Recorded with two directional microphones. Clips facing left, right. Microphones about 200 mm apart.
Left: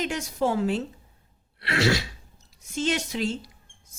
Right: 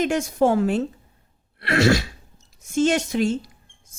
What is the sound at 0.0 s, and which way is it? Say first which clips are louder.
A woman's voice: right 7 dB; 50° right (ahead or behind).